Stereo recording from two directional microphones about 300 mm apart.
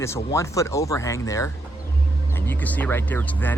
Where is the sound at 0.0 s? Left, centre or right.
Centre.